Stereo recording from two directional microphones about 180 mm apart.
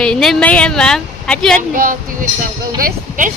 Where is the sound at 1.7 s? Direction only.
50° right (ahead or behind).